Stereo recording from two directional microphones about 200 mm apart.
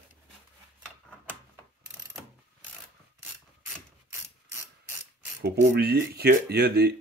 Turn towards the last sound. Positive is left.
turn(degrees=-55)  # may be behind; listen again after turning